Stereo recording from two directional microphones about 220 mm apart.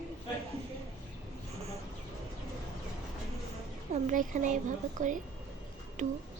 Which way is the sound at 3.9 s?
35° right (ahead or behind).